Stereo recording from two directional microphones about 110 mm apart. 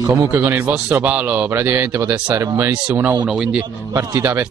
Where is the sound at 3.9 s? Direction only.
20° right (ahead or behind).